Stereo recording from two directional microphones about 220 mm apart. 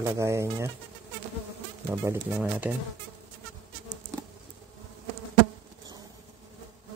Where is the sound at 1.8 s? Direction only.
10° right (ahead or behind).